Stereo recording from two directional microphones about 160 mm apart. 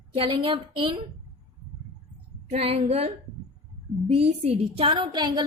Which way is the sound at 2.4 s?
40° right (ahead or behind).